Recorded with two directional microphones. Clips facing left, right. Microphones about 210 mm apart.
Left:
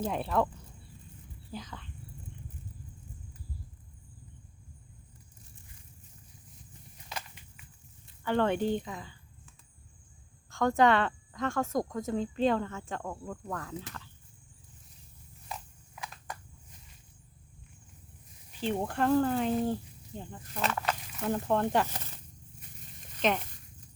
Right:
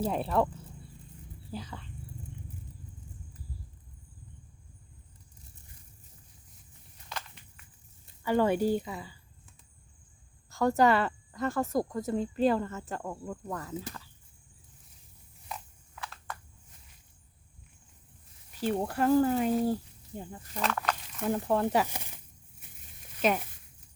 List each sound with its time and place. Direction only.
0.0 s speech: 5° right (ahead or behind)
1.6 s speech: 5° right (ahead or behind)
7.1 s a sound: 15° left (ahead or behind)
8.2 s speech: 10° right (ahead or behind)
10.5 s speech: 5° right (ahead or behind)
16.0 s a sound: 15° left (ahead or behind)
18.6 s speech: 5° right (ahead or behind)
20.6 s speech: 5° left (ahead or behind); by 22.2 s 10° right (ahead or behind)
23.0 s a sound: 5° right (ahead or behind)